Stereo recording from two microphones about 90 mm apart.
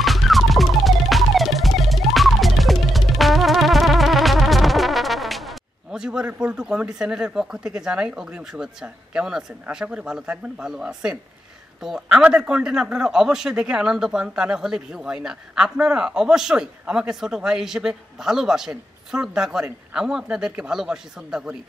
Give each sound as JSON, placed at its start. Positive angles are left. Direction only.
{"t": 0.0, "sound": "music", "side_deg": 0}
{"t": 11.8, "sound": "a man's voice", "side_deg": -10}